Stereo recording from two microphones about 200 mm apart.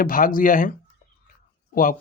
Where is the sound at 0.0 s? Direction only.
45° left (ahead or behind).